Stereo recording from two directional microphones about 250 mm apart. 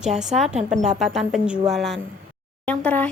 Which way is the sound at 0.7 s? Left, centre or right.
Right.